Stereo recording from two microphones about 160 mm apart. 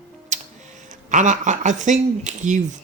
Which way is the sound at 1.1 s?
50° right (ahead or behind).